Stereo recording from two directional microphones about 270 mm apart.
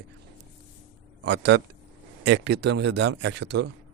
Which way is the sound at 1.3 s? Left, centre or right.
Right.